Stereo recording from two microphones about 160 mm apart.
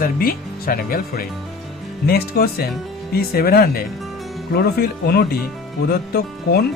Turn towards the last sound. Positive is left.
turn(degrees=75)  # may be behind; listen again after turning